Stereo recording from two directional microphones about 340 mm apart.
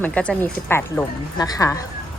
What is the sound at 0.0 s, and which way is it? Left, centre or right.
Speech, centre.